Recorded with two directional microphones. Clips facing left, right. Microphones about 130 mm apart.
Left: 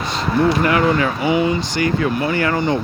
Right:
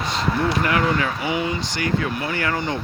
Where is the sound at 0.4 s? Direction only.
30° left (ahead or behind).